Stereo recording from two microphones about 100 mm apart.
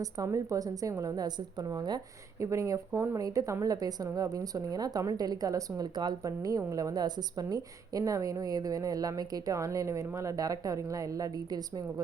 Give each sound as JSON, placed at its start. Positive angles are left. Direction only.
{"t": 0.0, "sound": "a woman's voice", "side_deg": -35}